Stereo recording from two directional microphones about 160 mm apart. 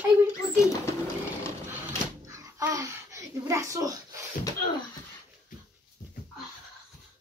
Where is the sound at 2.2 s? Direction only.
20° right (ahead or behind).